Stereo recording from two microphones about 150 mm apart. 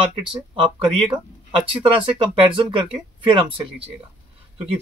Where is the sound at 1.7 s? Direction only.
35° right (ahead or behind).